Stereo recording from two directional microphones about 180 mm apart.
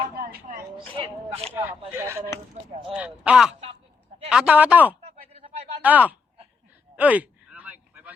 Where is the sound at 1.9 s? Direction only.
15° right (ahead or behind).